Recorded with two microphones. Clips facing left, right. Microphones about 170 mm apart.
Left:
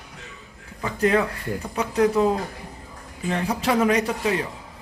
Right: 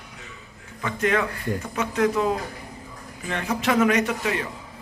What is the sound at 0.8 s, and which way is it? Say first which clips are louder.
A man's voice: left 3 dB; 35° left (ahead or behind).